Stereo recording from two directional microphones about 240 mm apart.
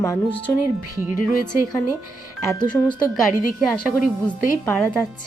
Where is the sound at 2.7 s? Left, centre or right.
Centre.